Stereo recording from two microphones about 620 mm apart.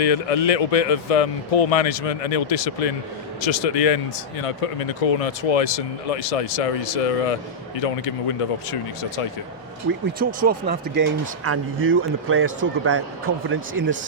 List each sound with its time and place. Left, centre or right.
0.0 s speech: left
10.2 s speech: centre